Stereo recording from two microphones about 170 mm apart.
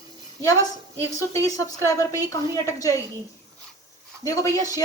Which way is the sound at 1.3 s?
20° left (ahead or behind).